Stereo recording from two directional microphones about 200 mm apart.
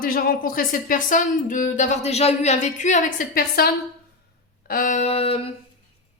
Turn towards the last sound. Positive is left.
turn(degrees=30)  # may be behind; listen again after turning